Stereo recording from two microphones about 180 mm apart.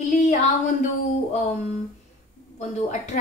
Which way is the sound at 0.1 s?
40° left (ahead or behind).